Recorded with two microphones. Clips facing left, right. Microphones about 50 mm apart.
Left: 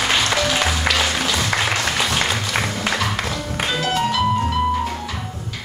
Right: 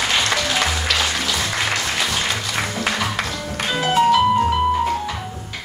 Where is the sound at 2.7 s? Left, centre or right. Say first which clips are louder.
Even; centre.